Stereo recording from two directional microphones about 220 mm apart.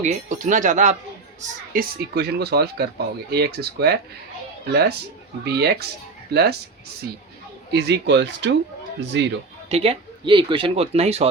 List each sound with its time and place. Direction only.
0.0 s speech: 35° right (ahead or behind)
7.7 s speech: 50° right (ahead or behind)
9.6 s speech: 25° right (ahead or behind)